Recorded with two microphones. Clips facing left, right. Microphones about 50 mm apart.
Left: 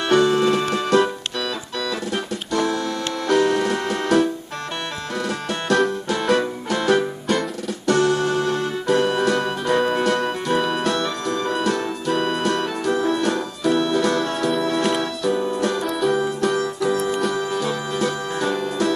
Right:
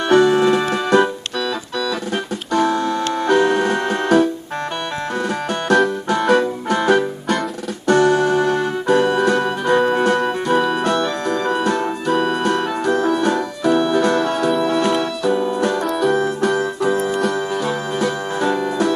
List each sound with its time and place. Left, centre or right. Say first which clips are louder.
0.1 s music: right 4 dB; right
2.1 s music: right 5 dB; right
5.5 s music: right 3 dB; right
10.5 s keyboard: right 4 dB; centre
10.8 s music: right 4 dB; right
15.2 s keyboard: right 3 dB; right
15.9 s music: right 3 dB; centre
16.6 s music: right 3 dB; right
17.1 s music: right 3 dB; centre
17.3 s music: right 2 dB; right